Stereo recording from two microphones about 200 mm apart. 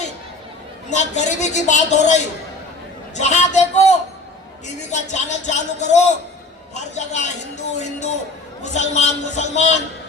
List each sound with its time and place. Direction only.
0.9 s speech: 35° left (ahead or behind)
3.2 s speech: 35° left (ahead or behind)